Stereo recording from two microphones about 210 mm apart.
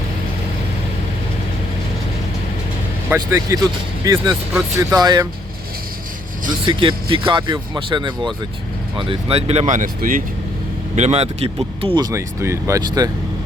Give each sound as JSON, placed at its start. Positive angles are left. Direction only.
{"t": 3.2, "sound": "speech", "side_deg": -15}
{"t": 6.5, "sound": "speech", "side_deg": -25}